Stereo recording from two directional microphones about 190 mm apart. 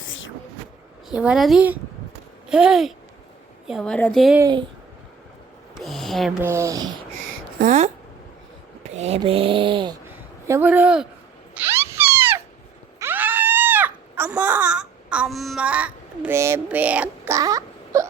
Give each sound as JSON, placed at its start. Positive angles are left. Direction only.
{"t": 0.0, "sound": "a sound", "side_deg": 90}
{"t": 1.1, "sound": "a woman's voice", "side_deg": -5}
{"t": 4.4, "sound": "speech", "side_deg": -20}
{"t": 5.7, "sound": "speech", "side_deg": 0}
{"t": 6.4, "sound": "speech", "side_deg": -15}
{"t": 7.6, "sound": "speech", "side_deg": -40}
{"t": 8.9, "sound": "speech", "side_deg": -35}
{"t": 10.1, "sound": "a man's voice", "side_deg": -10}
{"t": 11.5, "sound": "a sound", "side_deg": -10}